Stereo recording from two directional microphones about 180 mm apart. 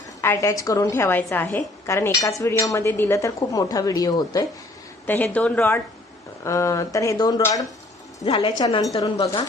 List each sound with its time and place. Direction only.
0.2 s a woman's voice: 15° left (ahead or behind)
5.0 s a woman's voice: 10° left (ahead or behind)